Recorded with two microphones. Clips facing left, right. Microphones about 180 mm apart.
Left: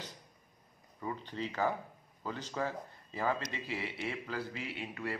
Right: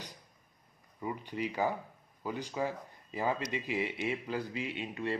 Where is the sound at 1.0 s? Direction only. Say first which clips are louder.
Right 3 dB; 15° right (ahead or behind).